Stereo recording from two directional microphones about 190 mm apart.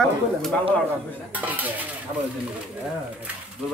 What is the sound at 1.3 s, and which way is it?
Dishes, 10° right (ahead or behind).